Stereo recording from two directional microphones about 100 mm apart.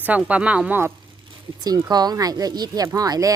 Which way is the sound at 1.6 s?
40° right (ahead or behind).